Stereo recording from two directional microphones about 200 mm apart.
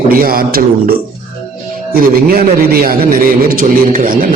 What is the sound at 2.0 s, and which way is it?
A man's voice, 45° right (ahead or behind).